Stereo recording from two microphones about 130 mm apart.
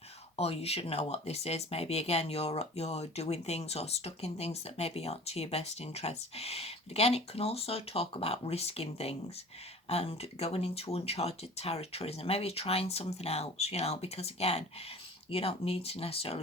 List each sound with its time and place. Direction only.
0.3 s speech: 50° left (ahead or behind)